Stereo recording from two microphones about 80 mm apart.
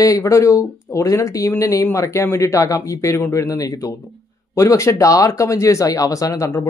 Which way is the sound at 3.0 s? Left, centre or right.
Left.